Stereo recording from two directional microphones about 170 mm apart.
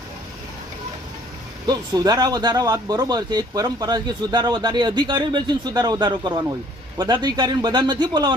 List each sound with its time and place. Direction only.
1.6 s speech: 25° right (ahead or behind)